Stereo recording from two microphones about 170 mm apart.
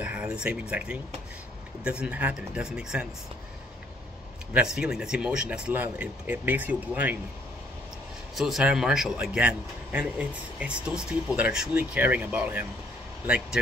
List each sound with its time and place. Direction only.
0.0 s speech: 5° right (ahead or behind)
4.6 s speech: 5° right (ahead or behind)
8.4 s a man's voice: centre (ahead or behind)